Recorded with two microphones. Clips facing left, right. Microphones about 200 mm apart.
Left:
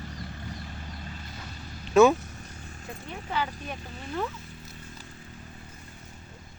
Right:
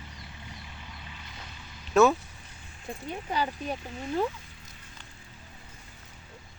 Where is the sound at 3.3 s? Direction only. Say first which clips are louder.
Right 1 dB; 30° right (ahead or behind).